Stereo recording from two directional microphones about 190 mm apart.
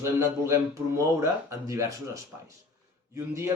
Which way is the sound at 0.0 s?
15° right (ahead or behind).